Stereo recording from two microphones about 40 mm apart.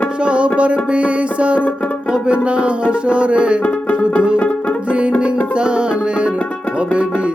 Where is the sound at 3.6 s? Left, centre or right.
Left.